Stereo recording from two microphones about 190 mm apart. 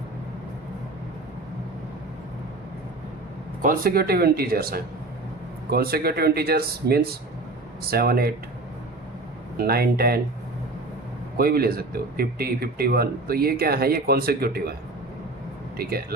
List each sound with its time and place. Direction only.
3.6 s speech: 50° right (ahead or behind)
9.6 s speech: 55° right (ahead or behind)
11.3 s speech: 50° right (ahead or behind)
15.8 s speech: 55° right (ahead or behind)